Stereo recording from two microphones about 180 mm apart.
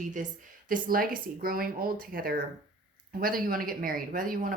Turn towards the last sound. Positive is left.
turn(degrees=-50)  # may be behind; listen again after turning